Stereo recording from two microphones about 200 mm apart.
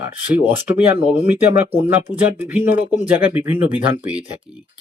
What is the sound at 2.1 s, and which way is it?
Speech, 35° left (ahead or behind).